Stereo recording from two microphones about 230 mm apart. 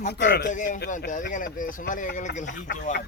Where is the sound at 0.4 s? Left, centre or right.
Left.